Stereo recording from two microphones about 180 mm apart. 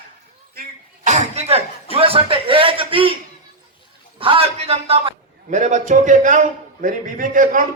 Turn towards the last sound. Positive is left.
turn(degrees=-45)  # may be behind; listen again after turning